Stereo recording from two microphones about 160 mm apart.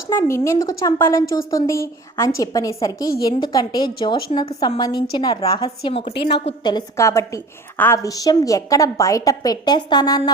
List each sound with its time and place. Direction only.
0.1 s a woman's voice: 15° left (ahead or behind)